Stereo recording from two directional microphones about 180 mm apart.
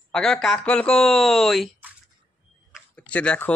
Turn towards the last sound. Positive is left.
turn(degrees=5)  # may be behind; listen again after turning